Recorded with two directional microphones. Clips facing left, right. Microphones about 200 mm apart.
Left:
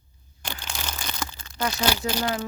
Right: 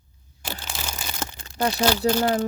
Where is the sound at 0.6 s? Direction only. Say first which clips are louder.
Left 2 dB; 5° right (ahead or behind).